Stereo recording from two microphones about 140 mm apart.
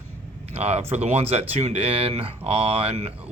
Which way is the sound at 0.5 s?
50° right (ahead or behind).